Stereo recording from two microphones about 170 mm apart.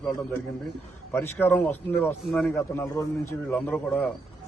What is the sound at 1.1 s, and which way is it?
A man's voice, 15° left (ahead or behind).